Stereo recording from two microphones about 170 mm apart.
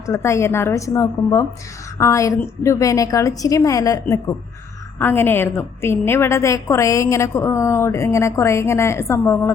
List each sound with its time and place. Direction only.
0.0 s a woman's voice: 15° left (ahead or behind)